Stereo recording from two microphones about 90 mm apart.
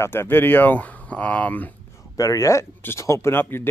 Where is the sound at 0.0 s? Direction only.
25° left (ahead or behind).